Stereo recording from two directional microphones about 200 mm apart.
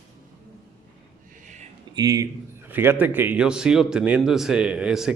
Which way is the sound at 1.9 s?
20° right (ahead or behind).